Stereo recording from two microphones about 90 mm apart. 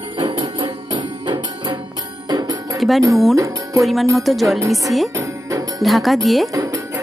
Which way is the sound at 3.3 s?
40° right (ahead or behind).